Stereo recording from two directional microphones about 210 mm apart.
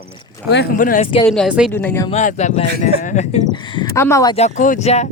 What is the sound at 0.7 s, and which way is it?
Speech, 40° left (ahead or behind).